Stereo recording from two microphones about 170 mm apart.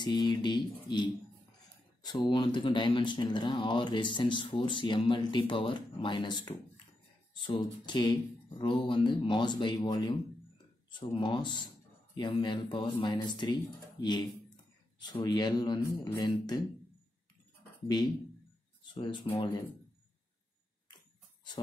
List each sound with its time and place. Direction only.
0.0 s speech: 25° left (ahead or behind)
18.9 s speech: 30° left (ahead or behind)